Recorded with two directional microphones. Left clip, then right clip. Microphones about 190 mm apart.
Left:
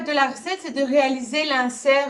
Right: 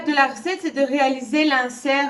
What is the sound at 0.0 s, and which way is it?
A woman's voice, 25° left (ahead or behind).